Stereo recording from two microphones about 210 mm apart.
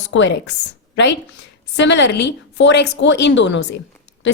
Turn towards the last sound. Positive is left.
turn(degrees=60)  # may be behind; listen again after turning